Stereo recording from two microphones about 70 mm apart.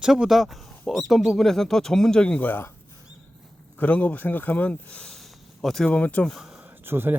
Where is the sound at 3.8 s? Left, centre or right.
Left; by 5.9 s centre.